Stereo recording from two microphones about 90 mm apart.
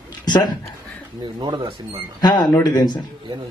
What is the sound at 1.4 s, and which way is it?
Speech, 55° right (ahead or behind).